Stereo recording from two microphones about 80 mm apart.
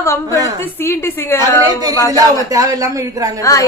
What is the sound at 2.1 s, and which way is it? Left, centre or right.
Speech, right.